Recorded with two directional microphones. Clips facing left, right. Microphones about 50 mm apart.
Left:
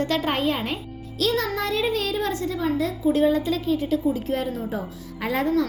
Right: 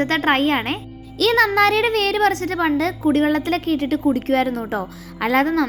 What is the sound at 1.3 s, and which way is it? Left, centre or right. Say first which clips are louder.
A child's voice: right 9 dB; right.